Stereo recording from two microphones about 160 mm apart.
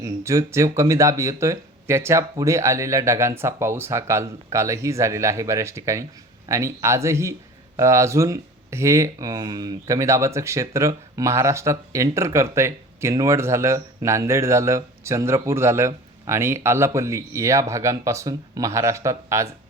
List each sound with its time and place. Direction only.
0.0 s speech: 20° right (ahead or behind)